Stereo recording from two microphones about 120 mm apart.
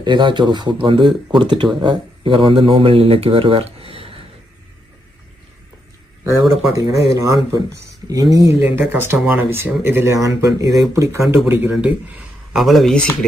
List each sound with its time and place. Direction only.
0.0 s speech: 40° right (ahead or behind)
6.4 s speech: centre (ahead or behind)
6.7 s speech: 25° right (ahead or behind)
8.1 s speech: 30° right (ahead or behind)
11.7 s speech: 10° right (ahead or behind)
12.6 s speech: centre (ahead or behind)